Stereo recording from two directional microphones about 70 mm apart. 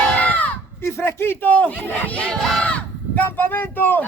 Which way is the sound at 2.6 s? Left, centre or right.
Centre.